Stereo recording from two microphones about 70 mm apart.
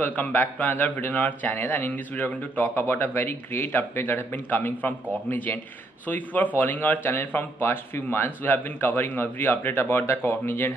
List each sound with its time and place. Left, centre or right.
0.0 s a man's voice: left